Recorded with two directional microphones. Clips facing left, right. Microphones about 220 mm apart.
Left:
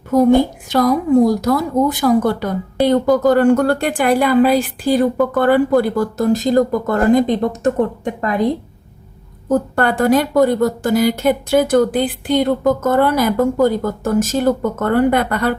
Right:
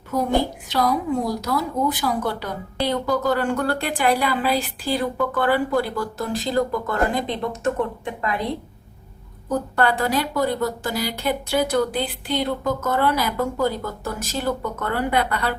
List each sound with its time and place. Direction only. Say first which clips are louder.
0.7 s a woman's voice: left 8 dB; 45° left (ahead or behind)
9.5 s a woman's voice: left 5 dB; 50° left (ahead or behind)